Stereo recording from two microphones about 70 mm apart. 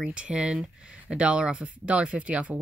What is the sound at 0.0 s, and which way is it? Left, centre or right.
Speech, centre.